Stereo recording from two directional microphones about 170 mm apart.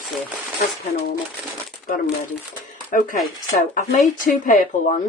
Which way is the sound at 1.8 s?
50° left (ahead or behind).